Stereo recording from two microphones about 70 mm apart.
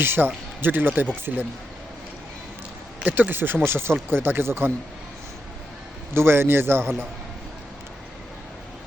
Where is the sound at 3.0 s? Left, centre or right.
Right.